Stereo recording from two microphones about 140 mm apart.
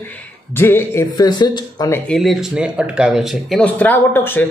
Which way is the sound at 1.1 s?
30° left (ahead or behind).